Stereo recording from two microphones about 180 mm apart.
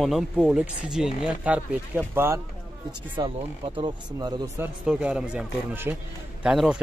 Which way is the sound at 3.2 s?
30° right (ahead or behind).